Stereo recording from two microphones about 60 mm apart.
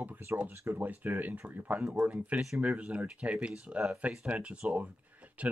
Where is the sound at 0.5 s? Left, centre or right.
Right.